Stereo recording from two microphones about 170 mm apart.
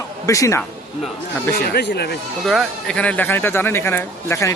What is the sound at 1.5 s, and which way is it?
Speech, 70° left (ahead or behind).